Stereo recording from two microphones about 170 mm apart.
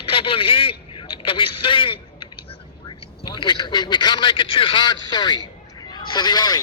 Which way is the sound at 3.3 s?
25° left (ahead or behind).